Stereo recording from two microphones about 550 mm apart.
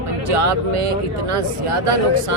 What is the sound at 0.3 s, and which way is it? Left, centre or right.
Speech, right.